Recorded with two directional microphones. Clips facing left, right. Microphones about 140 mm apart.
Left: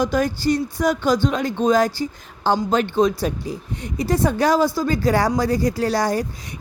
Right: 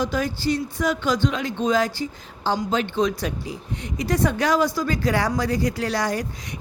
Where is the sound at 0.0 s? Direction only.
45° left (ahead or behind).